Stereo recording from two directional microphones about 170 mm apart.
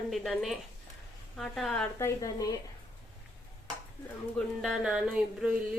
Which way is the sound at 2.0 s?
20° left (ahead or behind).